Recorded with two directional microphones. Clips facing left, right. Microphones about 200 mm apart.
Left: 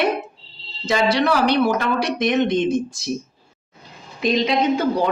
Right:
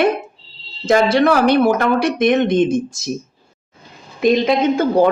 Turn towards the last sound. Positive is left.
turn(degrees=-50)  # may be behind; listen again after turning